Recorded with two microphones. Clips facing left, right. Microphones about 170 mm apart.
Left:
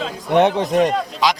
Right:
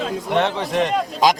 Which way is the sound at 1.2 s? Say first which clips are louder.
Right 3 dB; 45° right (ahead or behind).